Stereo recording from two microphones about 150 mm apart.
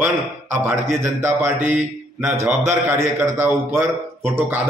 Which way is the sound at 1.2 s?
15° right (ahead or behind).